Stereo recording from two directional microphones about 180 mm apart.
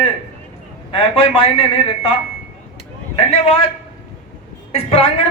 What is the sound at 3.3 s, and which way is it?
Speech, 35° left (ahead or behind).